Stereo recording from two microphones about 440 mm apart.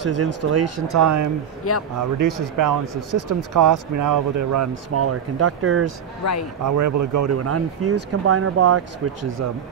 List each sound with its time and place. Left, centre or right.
0.0 s speech: right
1.6 s speech: left
2.0 s speech: right
6.6 s speech: right